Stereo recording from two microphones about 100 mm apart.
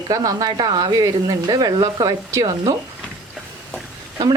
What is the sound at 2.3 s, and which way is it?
Speech, 30° right (ahead or behind).